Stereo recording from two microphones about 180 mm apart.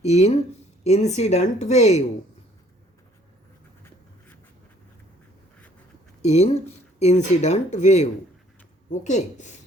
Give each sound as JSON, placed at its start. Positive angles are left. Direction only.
{"t": 0.0, "sound": "speech", "side_deg": 35}
{"t": 6.2, "sound": "speech", "side_deg": 40}